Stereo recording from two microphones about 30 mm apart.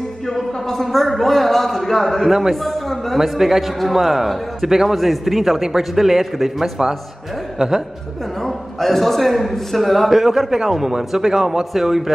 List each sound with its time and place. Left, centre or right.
0.3 s music: centre
0.9 s a man's voice: centre
3.3 s a man's voice: centre
4.6 s a man's voice: centre
4.9 s a man's voice: centre
7.5 s speech: right
8.4 s a man's voice: centre
10.0 s a man's voice: centre